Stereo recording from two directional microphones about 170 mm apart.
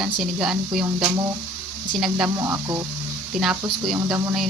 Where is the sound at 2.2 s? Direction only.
15° right (ahead or behind).